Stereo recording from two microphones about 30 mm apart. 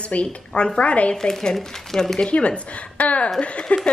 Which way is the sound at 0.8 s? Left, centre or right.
Left.